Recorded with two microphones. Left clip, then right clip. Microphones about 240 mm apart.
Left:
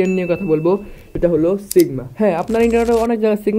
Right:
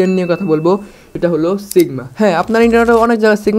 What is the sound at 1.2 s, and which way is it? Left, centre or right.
A man's voice, right.